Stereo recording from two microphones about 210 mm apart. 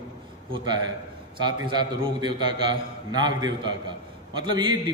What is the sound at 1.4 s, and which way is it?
A man's voice, 20° right (ahead or behind).